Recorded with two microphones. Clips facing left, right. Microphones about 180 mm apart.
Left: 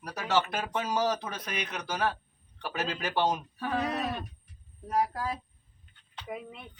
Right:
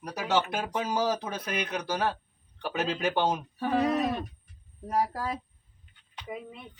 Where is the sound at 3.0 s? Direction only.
15° right (ahead or behind).